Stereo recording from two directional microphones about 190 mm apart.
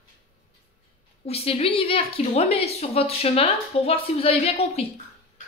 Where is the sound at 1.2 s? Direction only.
30° left (ahead or behind).